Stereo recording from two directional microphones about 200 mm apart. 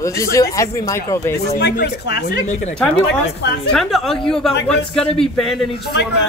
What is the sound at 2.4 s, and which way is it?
Speech, 35° left (ahead or behind).